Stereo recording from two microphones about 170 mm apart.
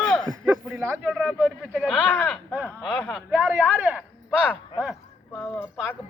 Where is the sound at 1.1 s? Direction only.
Centre (ahead or behind).